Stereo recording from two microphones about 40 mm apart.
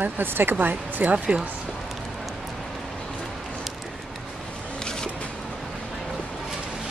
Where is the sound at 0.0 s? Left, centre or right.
Right.